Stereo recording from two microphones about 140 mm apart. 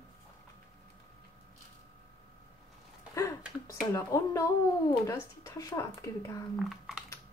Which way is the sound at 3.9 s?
20° left (ahead or behind).